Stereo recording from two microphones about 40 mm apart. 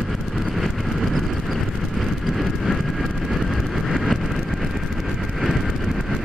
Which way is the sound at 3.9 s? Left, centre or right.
Centre.